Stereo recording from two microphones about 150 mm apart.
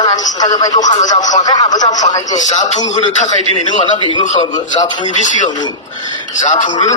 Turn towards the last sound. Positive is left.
turn(degrees=55)  # may be behind; listen again after turning